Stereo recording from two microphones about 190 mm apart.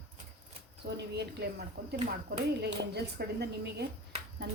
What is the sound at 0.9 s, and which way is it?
Speech, 60° right (ahead or behind).